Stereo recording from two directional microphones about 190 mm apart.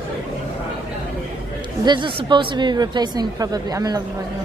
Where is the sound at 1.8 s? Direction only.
25° right (ahead or behind).